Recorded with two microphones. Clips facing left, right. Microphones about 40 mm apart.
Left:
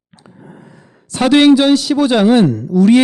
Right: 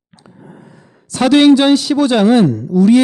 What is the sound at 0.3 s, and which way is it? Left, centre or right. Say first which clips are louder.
Sigh: even; centre.